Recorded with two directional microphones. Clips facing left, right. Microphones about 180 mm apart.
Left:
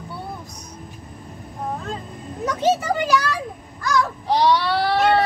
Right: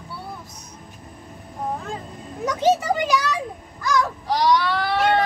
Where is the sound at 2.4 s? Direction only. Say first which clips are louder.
Even; 15° right (ahead or behind).